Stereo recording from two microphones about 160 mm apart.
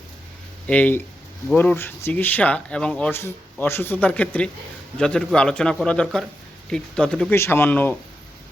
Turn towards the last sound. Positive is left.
turn(degrees=10)  # may be behind; listen again after turning